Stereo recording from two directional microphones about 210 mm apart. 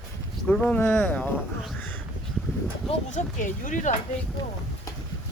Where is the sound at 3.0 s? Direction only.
35° left (ahead or behind).